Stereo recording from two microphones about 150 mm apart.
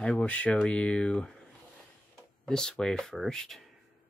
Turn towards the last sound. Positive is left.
turn(degrees=0)  # may be behind; listen again after turning